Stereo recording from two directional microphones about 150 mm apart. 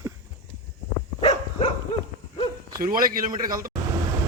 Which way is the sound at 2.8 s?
70° right (ahead or behind).